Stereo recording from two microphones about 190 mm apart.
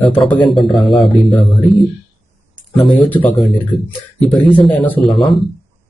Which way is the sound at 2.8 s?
10° left (ahead or behind).